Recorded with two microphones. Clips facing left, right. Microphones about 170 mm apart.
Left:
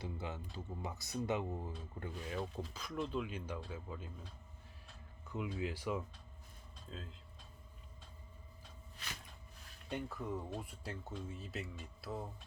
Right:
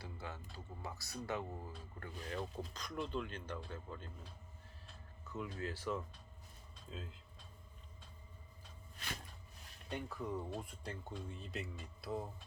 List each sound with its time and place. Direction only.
0.0 s speech: 20° left (ahead or behind)
2.2 s speech: 5° left (ahead or behind)
5.3 s speech: 15° left (ahead or behind)
6.9 s speech: 5° right (ahead or behind)
9.9 s speech: 5° left (ahead or behind)